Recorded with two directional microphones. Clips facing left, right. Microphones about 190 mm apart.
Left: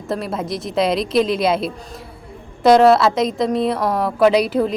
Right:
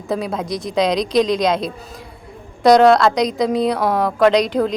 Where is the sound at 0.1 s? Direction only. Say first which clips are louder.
Right 1 dB; 5° left (ahead or behind).